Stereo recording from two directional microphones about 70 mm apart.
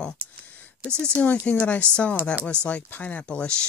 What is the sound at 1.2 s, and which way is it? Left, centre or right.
Speech, left.